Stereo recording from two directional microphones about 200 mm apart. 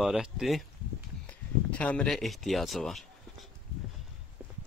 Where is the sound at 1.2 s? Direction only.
5° left (ahead or behind).